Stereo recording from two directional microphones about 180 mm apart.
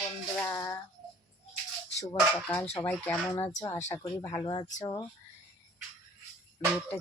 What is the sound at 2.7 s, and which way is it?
Speech, 10° left (ahead or behind).